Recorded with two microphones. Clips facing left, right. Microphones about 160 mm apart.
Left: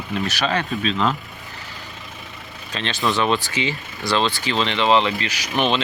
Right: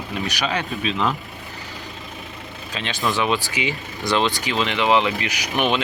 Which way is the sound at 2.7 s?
10° right (ahead or behind).